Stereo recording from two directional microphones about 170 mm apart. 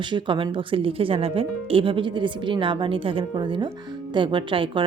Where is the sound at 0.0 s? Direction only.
25° right (ahead or behind).